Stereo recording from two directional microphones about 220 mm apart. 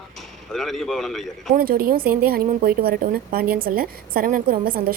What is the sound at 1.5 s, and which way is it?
A woman's voice, 40° right (ahead or behind).